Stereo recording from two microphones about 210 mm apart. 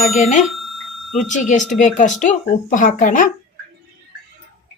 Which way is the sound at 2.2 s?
35° left (ahead or behind).